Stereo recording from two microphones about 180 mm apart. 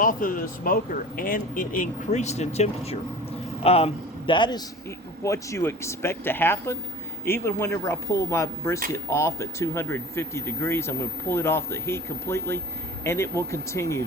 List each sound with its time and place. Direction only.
0.0 s a man's voice: 50° left (ahead or behind); by 14.0 s 15° left (ahead or behind)